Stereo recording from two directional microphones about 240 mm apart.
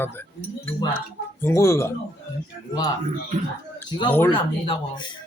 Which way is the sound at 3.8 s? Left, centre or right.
Centre.